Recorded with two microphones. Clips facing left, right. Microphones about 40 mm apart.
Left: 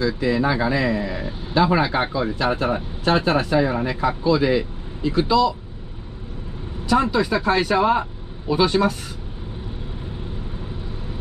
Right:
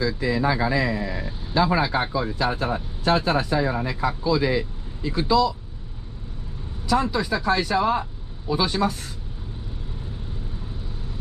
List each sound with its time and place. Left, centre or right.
0.0 s speech: centre
6.9 s speech: centre